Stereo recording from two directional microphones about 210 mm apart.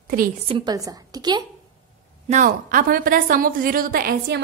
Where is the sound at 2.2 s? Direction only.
35° right (ahead or behind).